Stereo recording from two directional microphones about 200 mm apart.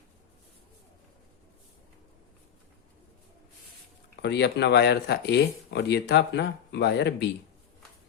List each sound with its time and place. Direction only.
4.2 s speech: 55° left (ahead or behind)